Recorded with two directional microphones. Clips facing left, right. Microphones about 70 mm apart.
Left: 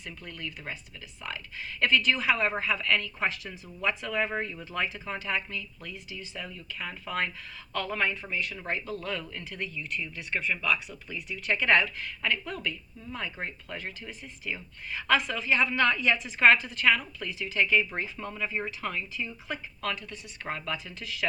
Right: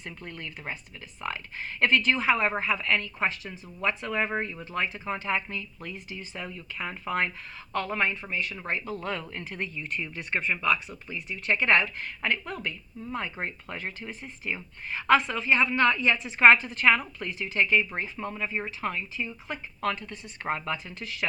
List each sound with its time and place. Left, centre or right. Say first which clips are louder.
0.0 s speech: right 1 dB; right